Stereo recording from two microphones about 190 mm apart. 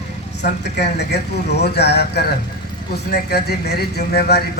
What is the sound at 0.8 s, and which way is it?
A man's voice, 60° left (ahead or behind).